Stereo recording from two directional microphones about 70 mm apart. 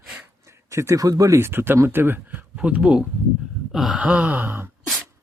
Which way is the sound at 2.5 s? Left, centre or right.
Centre.